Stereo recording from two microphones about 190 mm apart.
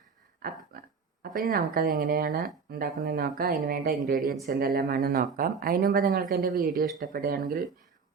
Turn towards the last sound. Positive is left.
turn(degrees=-55)  # may be behind; listen again after turning